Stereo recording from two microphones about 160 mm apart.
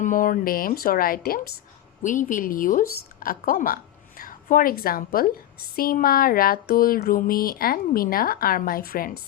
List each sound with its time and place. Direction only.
0.0 s a woman's voice: 60° left (ahead or behind)
2.0 s a woman's voice: 55° left (ahead or behind)